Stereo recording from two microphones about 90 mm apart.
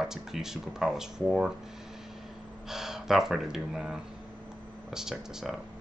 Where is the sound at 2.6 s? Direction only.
5° right (ahead or behind).